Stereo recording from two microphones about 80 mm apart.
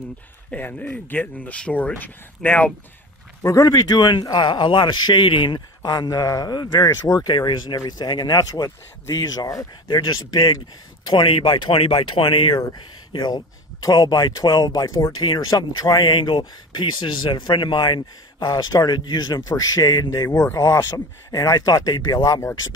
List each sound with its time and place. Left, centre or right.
0.5 s speech: left
3.6 s speech: left
7.2 s speech: left
7.7 s speech: left
8.6 s speech: left
9.8 s speech: left
11.1 s speech: left
13.1 s speech: left
15.1 s speech: left
18.9 s speech: left